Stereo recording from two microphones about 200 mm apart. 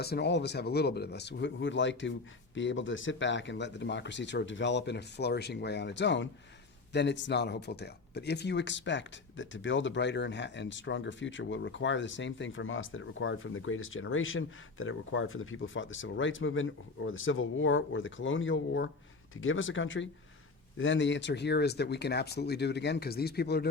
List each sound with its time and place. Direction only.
0.0 s speech: 55° left (ahead or behind)
19.4 s speech: 80° left; by 23.6 s 55° left (ahead or behind)